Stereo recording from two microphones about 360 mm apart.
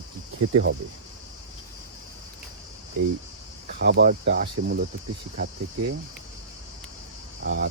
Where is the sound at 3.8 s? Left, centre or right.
Right.